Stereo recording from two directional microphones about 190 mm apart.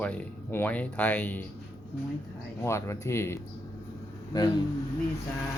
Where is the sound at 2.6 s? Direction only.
15° left (ahead or behind).